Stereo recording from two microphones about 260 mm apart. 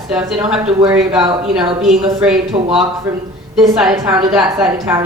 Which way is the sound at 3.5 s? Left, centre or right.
Centre.